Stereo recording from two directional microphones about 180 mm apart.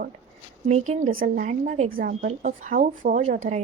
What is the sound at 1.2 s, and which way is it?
Speech, 55° right (ahead or behind).